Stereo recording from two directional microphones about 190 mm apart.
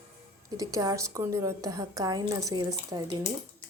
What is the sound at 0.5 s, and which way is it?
A woman's voice, 20° right (ahead or behind).